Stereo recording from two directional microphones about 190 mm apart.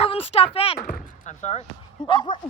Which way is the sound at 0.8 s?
40° left (ahead or behind).